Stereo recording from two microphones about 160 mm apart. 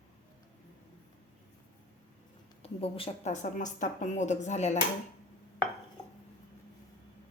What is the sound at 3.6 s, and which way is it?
Speech, 50° left (ahead or behind).